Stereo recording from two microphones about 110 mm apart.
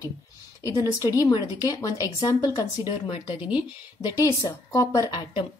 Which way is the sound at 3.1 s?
50° left (ahead or behind).